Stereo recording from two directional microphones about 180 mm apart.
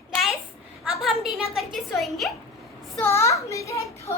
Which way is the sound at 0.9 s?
Centre (ahead or behind).